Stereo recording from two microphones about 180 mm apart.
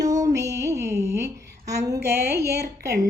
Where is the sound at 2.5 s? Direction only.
65° right (ahead or behind).